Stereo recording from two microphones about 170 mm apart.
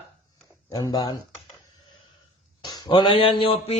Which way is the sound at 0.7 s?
25° left (ahead or behind).